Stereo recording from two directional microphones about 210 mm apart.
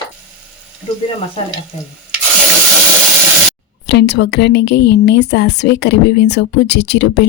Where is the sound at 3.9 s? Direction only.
55° left (ahead or behind).